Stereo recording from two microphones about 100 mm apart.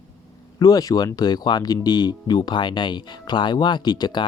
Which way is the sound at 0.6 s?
40° left (ahead or behind).